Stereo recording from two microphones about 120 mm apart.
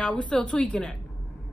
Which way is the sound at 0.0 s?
5° left (ahead or behind).